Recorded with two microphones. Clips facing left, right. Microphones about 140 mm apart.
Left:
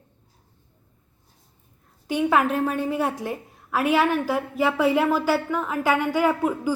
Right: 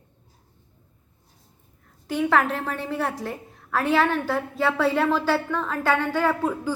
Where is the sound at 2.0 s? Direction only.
15° left (ahead or behind).